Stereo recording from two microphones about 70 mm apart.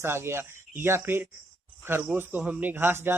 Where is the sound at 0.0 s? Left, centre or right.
Right.